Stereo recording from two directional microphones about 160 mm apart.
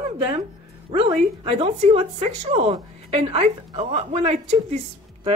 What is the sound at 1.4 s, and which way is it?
A woman's voice, 40° right (ahead or behind).